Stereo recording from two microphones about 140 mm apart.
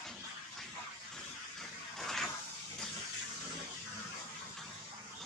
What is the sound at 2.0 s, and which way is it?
Vehicle, centre (ahead or behind).